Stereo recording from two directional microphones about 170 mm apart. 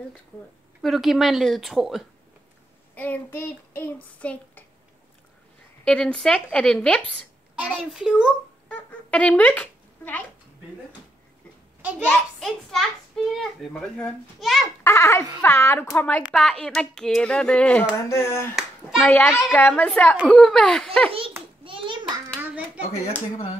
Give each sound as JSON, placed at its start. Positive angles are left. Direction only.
{"t": 0.8, "sound": "a child's voice", "side_deg": 0}
{"t": 2.9, "sound": "child singing", "side_deg": 10}
{"t": 5.9, "sound": "a child's voice", "side_deg": 5}
{"t": 8.6, "sound": "a sound", "side_deg": 5}
{"t": 12.1, "sound": "a child's voice", "side_deg": 0}
{"t": 14.8, "sound": "speech", "side_deg": 15}
{"t": 15.4, "sound": "child singing", "side_deg": 15}
{"t": 16.2, "sound": "a child's voice", "side_deg": 0}
{"t": 18.0, "sound": "child singing", "side_deg": 15}
{"t": 18.6, "sound": "a child's voice", "side_deg": 0}
{"t": 21.6, "sound": "hands", "side_deg": -30}